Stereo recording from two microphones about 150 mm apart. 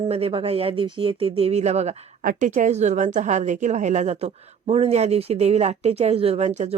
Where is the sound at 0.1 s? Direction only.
40° right (ahead or behind).